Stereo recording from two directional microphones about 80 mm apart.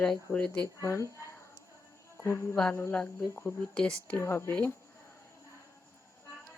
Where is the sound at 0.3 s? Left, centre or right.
Centre.